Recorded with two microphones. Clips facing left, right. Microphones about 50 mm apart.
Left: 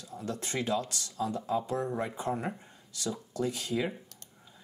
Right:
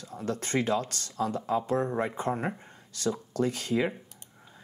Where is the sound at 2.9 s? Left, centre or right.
Right.